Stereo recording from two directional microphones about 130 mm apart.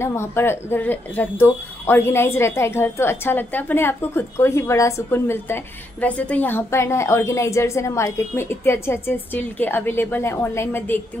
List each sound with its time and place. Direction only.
0.0 s speech: 20° left (ahead or behind)